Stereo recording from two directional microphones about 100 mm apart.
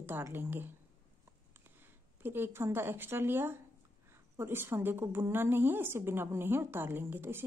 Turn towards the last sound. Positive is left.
turn(degrees=-25)  # may be behind; listen again after turning